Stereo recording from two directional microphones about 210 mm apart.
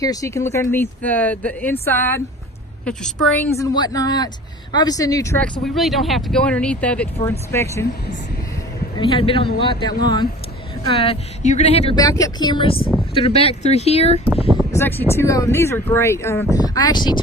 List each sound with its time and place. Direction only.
0.0 s speech: 15° left (ahead or behind)
5.6 s speech: centre (ahead or behind)
9.0 s speech: 25° left (ahead or behind)
11.9 s speech: 15° left (ahead or behind)
14.7 s speech: 10° left (ahead or behind)